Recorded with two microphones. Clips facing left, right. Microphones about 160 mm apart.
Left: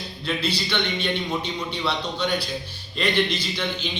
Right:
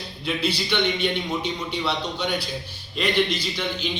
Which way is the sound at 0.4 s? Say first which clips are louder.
Right 4 dB; 15° right (ahead or behind).